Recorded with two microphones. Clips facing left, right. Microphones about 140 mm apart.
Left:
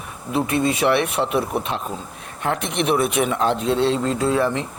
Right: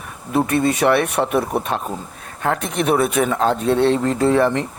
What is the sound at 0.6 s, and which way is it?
Speech, 50° right (ahead or behind).